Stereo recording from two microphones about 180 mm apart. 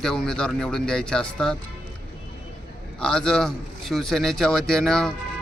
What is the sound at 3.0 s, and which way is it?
Speech, 5° left (ahead or behind).